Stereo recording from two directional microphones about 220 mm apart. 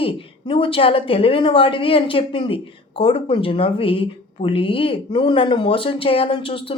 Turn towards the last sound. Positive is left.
turn(degrees=25)  # may be behind; listen again after turning